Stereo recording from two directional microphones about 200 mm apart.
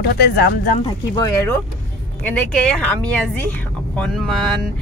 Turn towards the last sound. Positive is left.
turn(degrees=0)  # may be behind; listen again after turning